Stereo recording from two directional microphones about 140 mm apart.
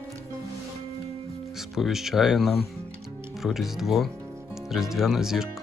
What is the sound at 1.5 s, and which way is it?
Speech, centre (ahead or behind).